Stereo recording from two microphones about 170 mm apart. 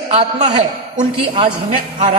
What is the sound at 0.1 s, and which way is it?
A man's voice, 40° right (ahead or behind).